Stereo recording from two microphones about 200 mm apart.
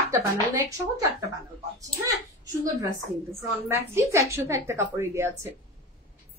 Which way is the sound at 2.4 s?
15° right (ahead or behind).